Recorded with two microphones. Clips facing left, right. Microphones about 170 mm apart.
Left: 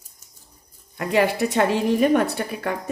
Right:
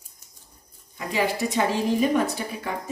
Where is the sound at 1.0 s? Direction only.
65° left (ahead or behind).